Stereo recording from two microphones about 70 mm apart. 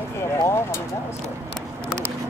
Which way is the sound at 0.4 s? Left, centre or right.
Left.